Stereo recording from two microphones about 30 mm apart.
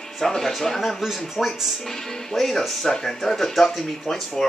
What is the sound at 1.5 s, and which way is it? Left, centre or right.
Speech, centre.